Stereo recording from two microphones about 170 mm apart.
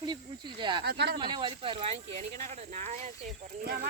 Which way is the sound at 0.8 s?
75° right (ahead or behind).